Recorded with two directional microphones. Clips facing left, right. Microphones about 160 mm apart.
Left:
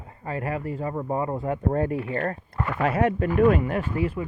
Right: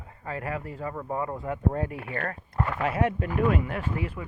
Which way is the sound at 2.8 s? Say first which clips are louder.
Left 5 dB; 45° left (ahead or behind).